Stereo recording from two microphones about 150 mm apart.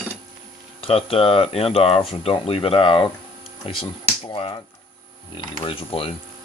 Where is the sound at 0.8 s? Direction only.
40° left (ahead or behind).